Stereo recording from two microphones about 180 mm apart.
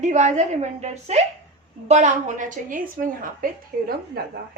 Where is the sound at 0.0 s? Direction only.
40° right (ahead or behind).